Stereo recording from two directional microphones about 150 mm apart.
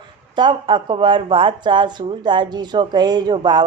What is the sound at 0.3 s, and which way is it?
Speech, 30° right (ahead or behind).